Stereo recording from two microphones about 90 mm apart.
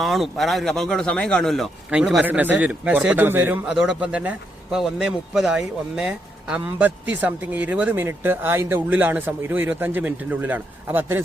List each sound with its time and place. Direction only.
0.0 s speech: centre (ahead or behind)
2.2 s speech: 20° right (ahead or behind)
3.8 s speech: 10° right (ahead or behind)
4.8 s speech: 5° right (ahead or behind)
7.9 s speech: 25° right (ahead or behind)